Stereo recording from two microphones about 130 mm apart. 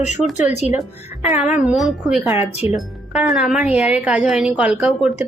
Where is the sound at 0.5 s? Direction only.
60° left (ahead or behind).